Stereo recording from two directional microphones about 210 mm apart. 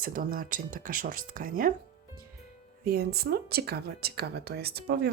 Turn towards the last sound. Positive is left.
turn(degrees=-50)  # may be behind; listen again after turning